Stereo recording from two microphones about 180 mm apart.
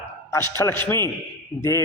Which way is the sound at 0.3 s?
15° left (ahead or behind).